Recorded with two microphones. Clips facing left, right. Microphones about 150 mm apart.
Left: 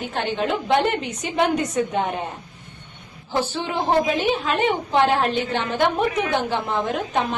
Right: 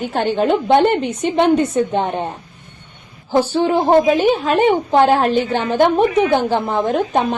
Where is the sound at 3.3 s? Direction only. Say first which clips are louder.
Right 9 dB; 40° right (ahead or behind).